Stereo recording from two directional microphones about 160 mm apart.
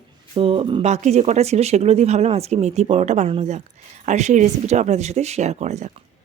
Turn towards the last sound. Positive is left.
turn(degrees=-45)  # may be behind; listen again after turning